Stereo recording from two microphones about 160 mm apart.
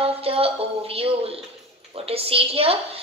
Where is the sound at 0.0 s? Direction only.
35° right (ahead or behind).